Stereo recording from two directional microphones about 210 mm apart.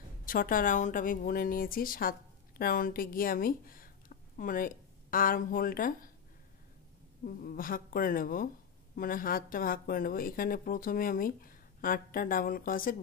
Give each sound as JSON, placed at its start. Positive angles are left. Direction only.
{"t": 0.2, "sound": "speech", "side_deg": 40}
{"t": 7.2, "sound": "a woman's voice", "side_deg": 40}